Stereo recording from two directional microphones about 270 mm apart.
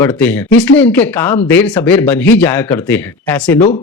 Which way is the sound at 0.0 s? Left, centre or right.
Centre.